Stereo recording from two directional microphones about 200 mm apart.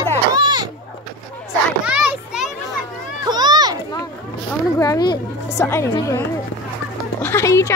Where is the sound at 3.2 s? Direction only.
20° right (ahead or behind).